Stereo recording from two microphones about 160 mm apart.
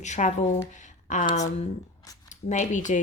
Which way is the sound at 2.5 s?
50° left (ahead or behind).